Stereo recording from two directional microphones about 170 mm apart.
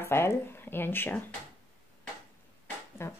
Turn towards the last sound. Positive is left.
turn(degrees=15)  # may be behind; listen again after turning